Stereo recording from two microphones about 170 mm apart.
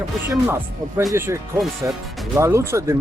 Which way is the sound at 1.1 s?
15° right (ahead or behind).